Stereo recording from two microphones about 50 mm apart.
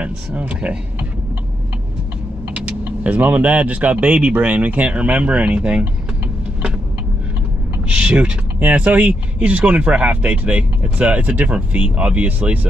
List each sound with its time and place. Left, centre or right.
0.0 s speech: right
2.5 s speech: right
7.9 s speech: right